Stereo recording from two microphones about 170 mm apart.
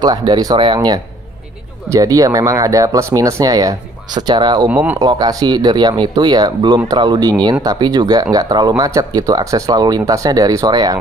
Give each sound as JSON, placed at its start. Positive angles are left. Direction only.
{"t": 0.0, "sound": "speech", "side_deg": -25}